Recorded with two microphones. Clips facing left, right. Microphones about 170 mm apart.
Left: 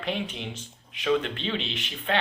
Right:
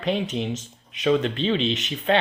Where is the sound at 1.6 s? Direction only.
25° right (ahead or behind).